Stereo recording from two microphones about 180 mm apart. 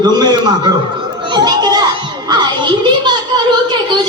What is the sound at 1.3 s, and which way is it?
Children playing, 20° right (ahead or behind).